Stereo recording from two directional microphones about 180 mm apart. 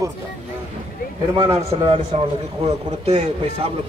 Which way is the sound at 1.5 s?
30° right (ahead or behind).